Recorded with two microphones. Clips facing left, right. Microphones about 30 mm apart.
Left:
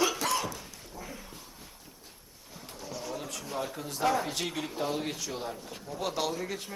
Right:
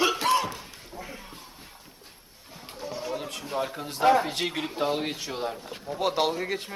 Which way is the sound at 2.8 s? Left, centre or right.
Right.